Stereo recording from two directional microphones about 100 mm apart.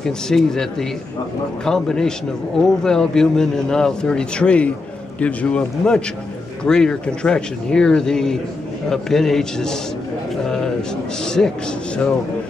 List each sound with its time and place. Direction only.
0.0 s a man's voice: 5° left (ahead or behind)